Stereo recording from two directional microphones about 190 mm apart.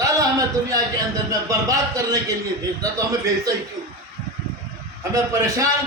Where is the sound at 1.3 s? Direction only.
15° right (ahead or behind).